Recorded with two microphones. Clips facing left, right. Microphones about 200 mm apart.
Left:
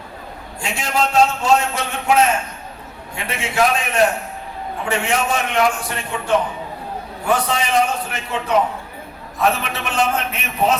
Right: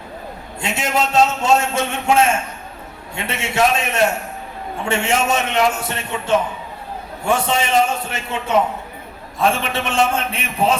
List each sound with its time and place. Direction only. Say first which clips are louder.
0.6 s a man's voice: right 1 dB; 25° right (ahead or behind)